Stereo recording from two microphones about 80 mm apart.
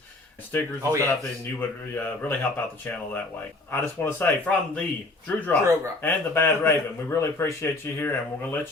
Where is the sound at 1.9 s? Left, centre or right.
Left.